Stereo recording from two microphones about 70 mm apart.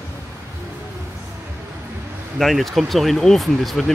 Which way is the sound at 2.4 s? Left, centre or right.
Centre.